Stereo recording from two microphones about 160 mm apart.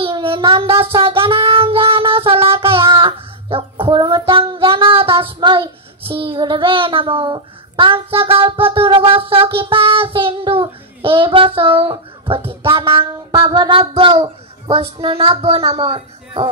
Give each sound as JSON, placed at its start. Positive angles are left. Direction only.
{"t": 0.0, "sound": "child singing", "side_deg": -35}
{"t": 12.7, "sound": "speech", "side_deg": -35}